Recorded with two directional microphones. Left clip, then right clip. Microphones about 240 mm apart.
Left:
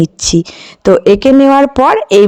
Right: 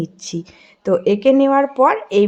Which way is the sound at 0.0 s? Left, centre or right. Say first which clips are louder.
Left 15 dB; left.